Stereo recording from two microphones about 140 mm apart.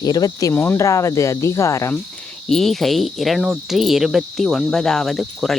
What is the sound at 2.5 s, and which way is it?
Cricket, centre (ahead or behind).